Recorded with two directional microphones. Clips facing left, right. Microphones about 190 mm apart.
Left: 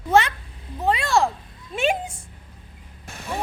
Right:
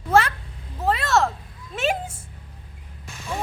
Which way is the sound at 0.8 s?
Centre (ahead or behind).